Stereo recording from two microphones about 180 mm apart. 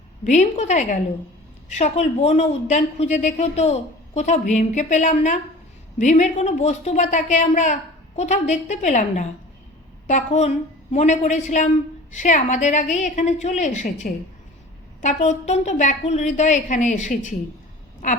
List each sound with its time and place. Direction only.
0.3 s a woman's voice: 40° left (ahead or behind)